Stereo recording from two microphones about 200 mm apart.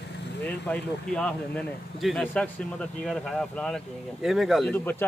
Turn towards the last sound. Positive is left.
turn(degrees=10)  # may be behind; listen again after turning